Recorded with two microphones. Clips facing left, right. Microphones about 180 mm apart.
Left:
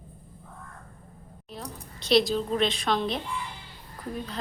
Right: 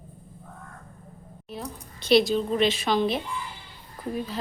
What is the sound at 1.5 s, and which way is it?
A woman's voice, centre (ahead or behind).